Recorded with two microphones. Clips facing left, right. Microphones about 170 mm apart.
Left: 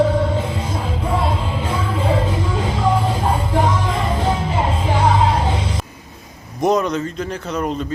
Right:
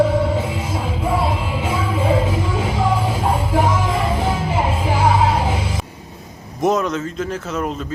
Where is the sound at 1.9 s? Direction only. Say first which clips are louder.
Right 2 dB; 25° right (ahead or behind).